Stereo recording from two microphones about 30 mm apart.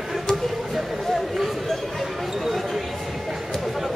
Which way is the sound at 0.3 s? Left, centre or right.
Left.